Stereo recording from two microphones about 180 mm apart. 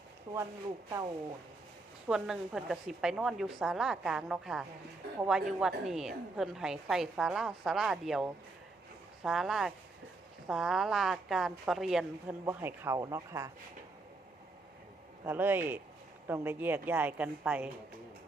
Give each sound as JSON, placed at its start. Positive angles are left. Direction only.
{"t": 2.0, "sound": "a woman's voice", "side_deg": -5}
{"t": 12.5, "sound": "a woman's voice", "side_deg": -10}
{"t": 15.2, "sound": "a woman's voice", "side_deg": -10}